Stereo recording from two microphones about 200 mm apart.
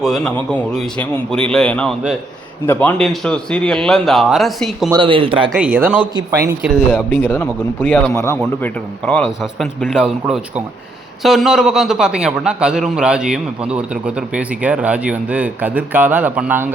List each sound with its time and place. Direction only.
0.0 s a man's voice: centre (ahead or behind)
4.9 s speech: 25° right (ahead or behind)
5.5 s speech: 5° right (ahead or behind)
6.6 s a man's voice: 5° left (ahead or behind)